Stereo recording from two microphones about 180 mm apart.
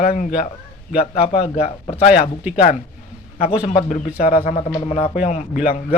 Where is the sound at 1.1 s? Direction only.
35° left (ahead or behind).